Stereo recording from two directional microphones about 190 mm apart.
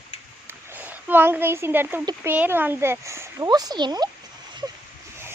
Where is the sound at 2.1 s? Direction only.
10° right (ahead or behind).